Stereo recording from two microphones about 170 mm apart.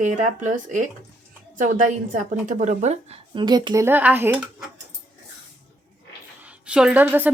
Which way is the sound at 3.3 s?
25° right (ahead or behind).